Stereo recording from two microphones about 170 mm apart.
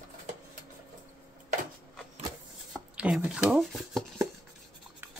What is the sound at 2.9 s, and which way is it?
Speech, 5° right (ahead or behind).